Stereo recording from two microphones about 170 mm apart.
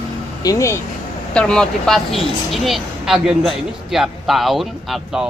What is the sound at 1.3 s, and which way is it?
Speech, 5° left (ahead or behind).